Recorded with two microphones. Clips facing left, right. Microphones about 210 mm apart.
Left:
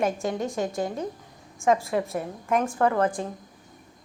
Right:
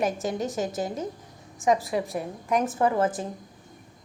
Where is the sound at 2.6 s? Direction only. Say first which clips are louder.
Even; 20° right (ahead or behind).